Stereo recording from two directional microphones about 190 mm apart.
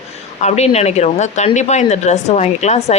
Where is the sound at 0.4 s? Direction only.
35° left (ahead or behind).